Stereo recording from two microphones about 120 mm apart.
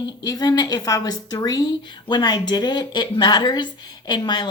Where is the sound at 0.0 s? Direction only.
35° left (ahead or behind).